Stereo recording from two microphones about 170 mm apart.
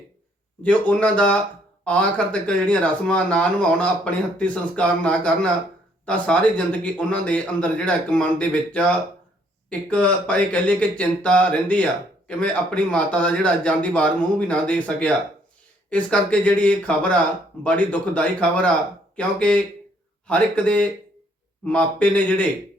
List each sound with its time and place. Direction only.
0.6 s speech: 5° left (ahead or behind)